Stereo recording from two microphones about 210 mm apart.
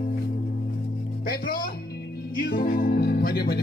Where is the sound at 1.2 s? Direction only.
45° left (ahead or behind).